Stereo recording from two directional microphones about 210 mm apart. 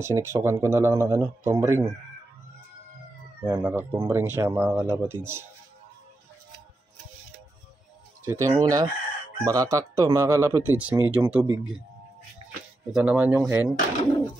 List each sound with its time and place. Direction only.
0.0 s speech: 10° right (ahead or behind)
3.5 s speech: 10° right (ahead or behind)
8.3 s speech: 15° right (ahead or behind)
12.9 s speech: 5° right (ahead or behind)